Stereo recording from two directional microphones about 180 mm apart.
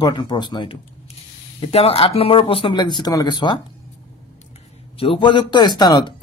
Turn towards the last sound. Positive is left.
turn(degrees=25)  # may be behind; listen again after turning